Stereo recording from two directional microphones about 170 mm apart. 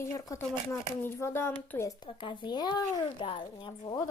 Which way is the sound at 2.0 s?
25° left (ahead or behind).